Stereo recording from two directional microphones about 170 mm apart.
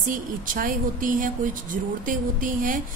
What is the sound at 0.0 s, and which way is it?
Speech, 55° right (ahead or behind).